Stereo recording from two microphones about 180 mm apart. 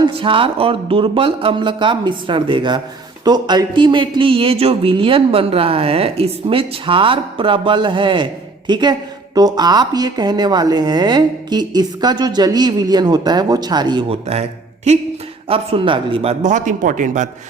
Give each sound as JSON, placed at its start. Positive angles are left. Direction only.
{"t": 0.0, "sound": "speech", "side_deg": -30}
{"t": 15.4, "sound": "speech", "side_deg": -30}
{"t": 16.4, "sound": "a man's voice", "side_deg": -45}